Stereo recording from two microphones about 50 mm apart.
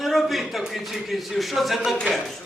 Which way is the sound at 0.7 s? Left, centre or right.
Centre.